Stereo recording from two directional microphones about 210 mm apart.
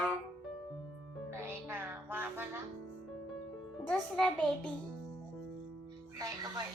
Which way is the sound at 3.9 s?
5° left (ahead or behind).